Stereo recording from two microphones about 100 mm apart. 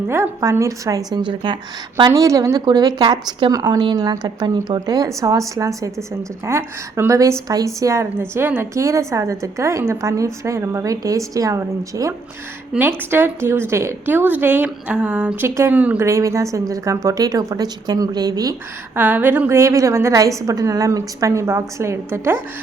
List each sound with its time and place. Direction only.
0.1 s speech: 30° right (ahead or behind)
1.2 s speech: 55° right (ahead or behind)
2.0 s speech: 35° right (ahead or behind)
12.8 s a woman's voice: 20° right (ahead or behind)
15.4 s a woman's voice: 25° right (ahead or behind)
15.7 s speech: 15° right (ahead or behind)
16.0 s speech: 30° right (ahead or behind)
18.9 s a woman's voice: 20° right (ahead or behind)